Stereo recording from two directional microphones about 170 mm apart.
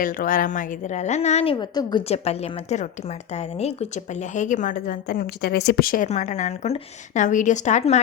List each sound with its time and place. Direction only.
0.0 s a woman's voice: 55° left (ahead or behind)
1.5 s a woman's voice: 25° left (ahead or behind); by 6.1 s 55° left (ahead or behind)
6.1 s a woman's voice: 45° left (ahead or behind)